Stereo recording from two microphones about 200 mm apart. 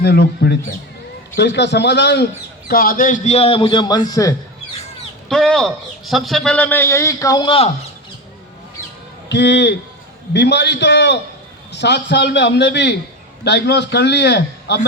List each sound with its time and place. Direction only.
0.0 s a man's voice: 55° left (ahead or behind)
2.6 s a man's voice: 45° left (ahead or behind); by 4.4 s 15° left (ahead or behind)
5.3 s a man's voice: centre (ahead or behind); by 7.7 s 25° left (ahead or behind)
9.3 s a man's voice: 60° left (ahead or behind)